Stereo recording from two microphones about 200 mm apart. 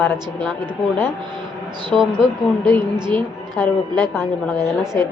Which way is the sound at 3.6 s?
10° left (ahead or behind).